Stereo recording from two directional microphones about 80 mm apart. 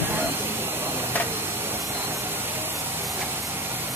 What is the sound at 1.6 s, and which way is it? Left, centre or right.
Vehicle, right.